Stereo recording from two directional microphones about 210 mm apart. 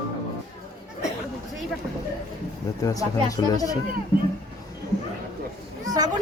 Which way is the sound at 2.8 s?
15° left (ahead or behind).